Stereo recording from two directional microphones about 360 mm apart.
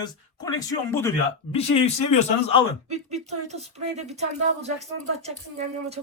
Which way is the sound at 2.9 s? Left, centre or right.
Centre.